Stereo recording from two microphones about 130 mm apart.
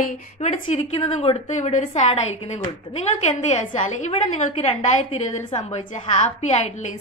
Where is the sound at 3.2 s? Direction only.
65° left (ahead or behind).